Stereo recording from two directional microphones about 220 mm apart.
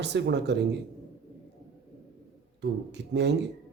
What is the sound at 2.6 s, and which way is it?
Speech, 50° right (ahead or behind).